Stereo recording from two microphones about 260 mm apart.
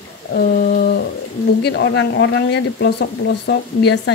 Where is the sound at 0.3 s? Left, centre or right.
Left.